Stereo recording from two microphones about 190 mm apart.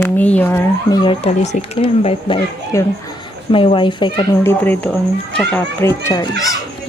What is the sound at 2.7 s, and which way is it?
Speech, 15° left (ahead or behind).